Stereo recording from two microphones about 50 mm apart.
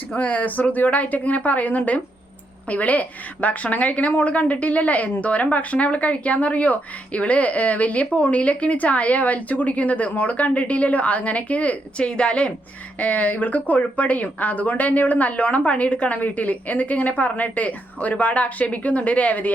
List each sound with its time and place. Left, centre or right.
0.2 s a woman's voice: left